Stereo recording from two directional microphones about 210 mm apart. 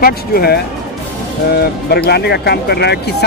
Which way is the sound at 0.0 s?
45° left (ahead or behind).